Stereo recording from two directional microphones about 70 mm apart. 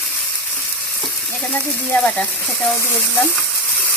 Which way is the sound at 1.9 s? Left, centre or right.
Left.